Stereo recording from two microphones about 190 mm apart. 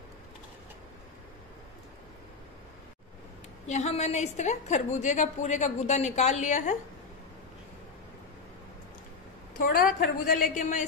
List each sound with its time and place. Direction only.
3.6 s a woman's voice: 35° left (ahead or behind)
9.6 s a woman's voice: 50° left (ahead or behind)